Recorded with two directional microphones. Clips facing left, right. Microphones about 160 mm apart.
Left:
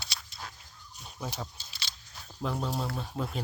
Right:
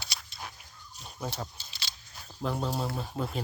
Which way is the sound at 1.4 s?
15° right (ahead or behind).